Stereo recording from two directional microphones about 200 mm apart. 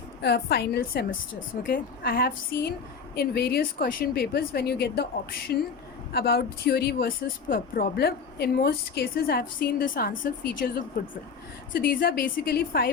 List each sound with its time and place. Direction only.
0.2 s speech: 55° left (ahead or behind)